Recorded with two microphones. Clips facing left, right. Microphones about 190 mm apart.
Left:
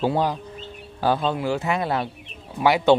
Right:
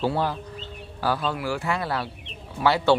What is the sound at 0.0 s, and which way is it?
Speech, 15° left (ahead or behind).